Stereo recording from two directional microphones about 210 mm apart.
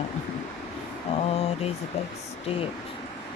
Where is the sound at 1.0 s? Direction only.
30° left (ahead or behind).